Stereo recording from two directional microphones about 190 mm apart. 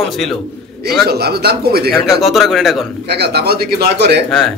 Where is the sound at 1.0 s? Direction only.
55° right (ahead or behind).